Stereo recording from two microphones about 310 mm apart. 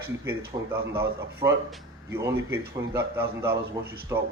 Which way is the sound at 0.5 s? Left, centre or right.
Centre.